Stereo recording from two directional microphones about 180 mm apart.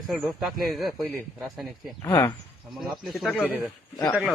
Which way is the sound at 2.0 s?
20° left (ahead or behind).